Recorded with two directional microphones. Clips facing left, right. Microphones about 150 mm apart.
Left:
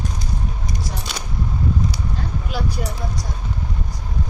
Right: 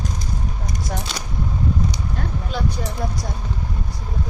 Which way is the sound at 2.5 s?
10° left (ahead or behind).